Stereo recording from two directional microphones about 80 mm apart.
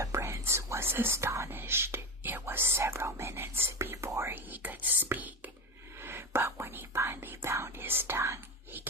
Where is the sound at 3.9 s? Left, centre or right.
Right.